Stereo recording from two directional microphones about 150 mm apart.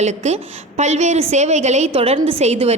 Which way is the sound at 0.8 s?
50° right (ahead or behind).